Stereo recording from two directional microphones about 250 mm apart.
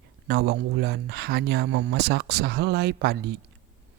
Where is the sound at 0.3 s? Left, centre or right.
Right.